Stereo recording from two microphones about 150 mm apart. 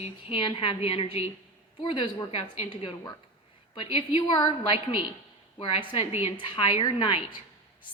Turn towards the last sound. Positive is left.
turn(degrees=35)  # may be behind; listen again after turning